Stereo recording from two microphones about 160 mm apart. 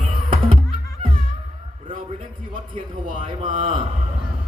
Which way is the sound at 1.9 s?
55° right (ahead or behind).